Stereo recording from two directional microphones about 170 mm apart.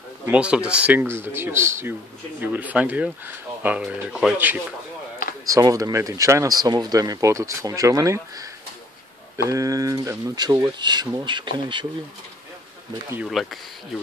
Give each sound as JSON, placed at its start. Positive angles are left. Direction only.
{"t": 0.3, "sound": "speech", "side_deg": -5}
{"t": 5.5, "sound": "speech", "side_deg": -20}
{"t": 13.3, "sound": "speech", "side_deg": 0}